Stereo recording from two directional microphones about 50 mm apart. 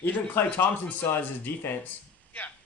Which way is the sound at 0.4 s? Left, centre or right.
Left.